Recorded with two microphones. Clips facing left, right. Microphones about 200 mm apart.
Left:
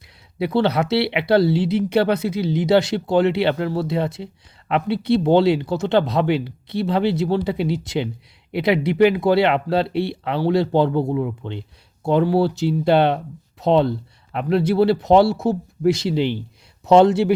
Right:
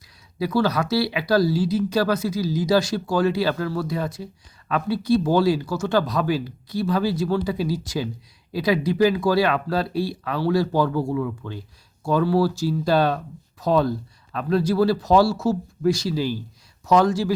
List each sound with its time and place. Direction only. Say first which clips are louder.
0.3 s speech: left 3 dB; 25° left (ahead or behind)